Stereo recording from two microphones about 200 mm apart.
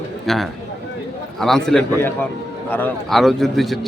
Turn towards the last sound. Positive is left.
turn(degrees=0)  # may be behind; listen again after turning